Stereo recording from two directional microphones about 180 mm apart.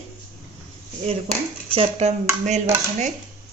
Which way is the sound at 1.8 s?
35° right (ahead or behind).